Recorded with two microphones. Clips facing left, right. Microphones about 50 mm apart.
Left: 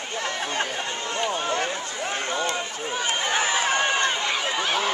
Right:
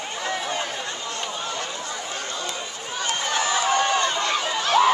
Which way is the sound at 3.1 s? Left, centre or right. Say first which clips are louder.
Right 1 dB; left.